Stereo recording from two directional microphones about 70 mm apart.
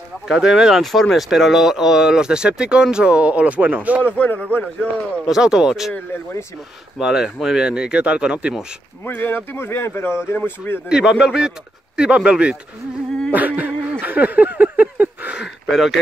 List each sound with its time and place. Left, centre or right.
0.3 s speech: centre; by 4.0 s right
4.2 s a man's voice: left
5.3 s speech: centre
7.0 s speech: centre
9.0 s speech: left
10.9 s speech: centre
13.3 s a sound: right
15.4 s speech: centre